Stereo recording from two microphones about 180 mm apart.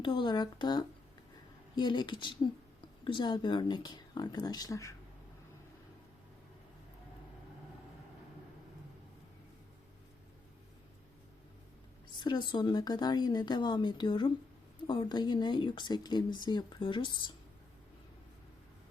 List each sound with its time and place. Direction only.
0.0 s speech: 30° left (ahead or behind)
12.2 s speech: 25° left (ahead or behind)